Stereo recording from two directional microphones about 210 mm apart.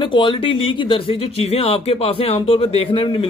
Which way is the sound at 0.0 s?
25° left (ahead or behind).